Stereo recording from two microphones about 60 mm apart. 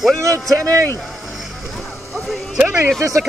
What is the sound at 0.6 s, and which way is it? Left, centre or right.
Speech, right.